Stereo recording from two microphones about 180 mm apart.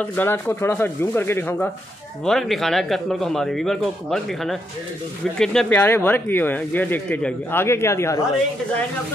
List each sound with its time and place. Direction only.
0.0 s speech: 10° left (ahead or behind)
2.2 s a man's voice: centre (ahead or behind)